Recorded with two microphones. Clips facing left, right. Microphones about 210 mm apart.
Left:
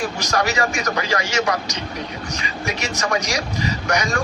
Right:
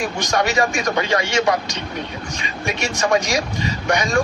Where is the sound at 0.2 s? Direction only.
25° right (ahead or behind).